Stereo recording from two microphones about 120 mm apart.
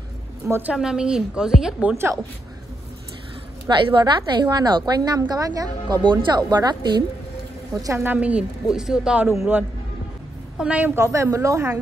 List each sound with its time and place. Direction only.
0.5 s a woman's voice: 15° right (ahead or behind)
3.6 s a woman's voice: 40° right (ahead or behind)
7.8 s a woman's voice: 20° right (ahead or behind)
10.6 s a woman's voice: 10° right (ahead or behind)
11.0 s a woman's voice: 25° right (ahead or behind)